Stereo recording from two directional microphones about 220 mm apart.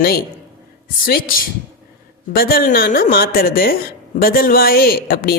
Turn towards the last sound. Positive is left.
turn(degrees=40)  # may be behind; listen again after turning